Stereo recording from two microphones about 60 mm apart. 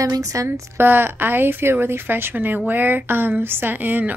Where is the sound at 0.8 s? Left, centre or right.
Right.